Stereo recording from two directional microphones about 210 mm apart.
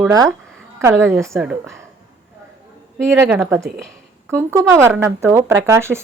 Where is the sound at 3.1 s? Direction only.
10° right (ahead or behind).